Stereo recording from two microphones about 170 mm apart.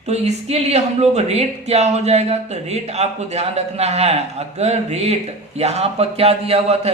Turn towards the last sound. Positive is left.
turn(degrees=-35)  # may be behind; listen again after turning